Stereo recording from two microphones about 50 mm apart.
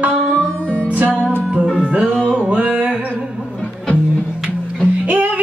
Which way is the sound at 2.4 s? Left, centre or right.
Right.